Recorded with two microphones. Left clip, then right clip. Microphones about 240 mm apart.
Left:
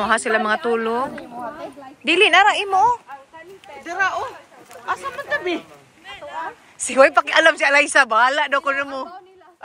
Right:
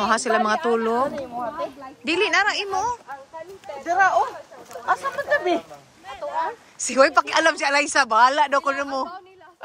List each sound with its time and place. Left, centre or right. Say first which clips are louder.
0.0 s speech: left 1 dB; centre
2.0 s a woman's voice: left 7 dB; centre
3.6 s a sound: right 3 dB; right
6.8 s speech: left 3 dB; centre